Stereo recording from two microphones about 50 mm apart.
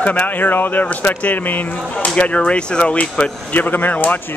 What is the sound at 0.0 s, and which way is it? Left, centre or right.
Speech, left.